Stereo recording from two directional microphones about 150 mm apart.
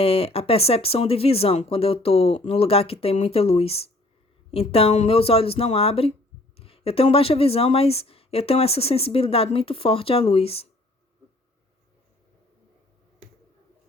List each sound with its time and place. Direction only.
0.0 s speech: 40° left (ahead or behind)